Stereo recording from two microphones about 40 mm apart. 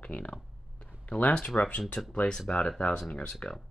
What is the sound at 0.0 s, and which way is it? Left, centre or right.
Speech, left.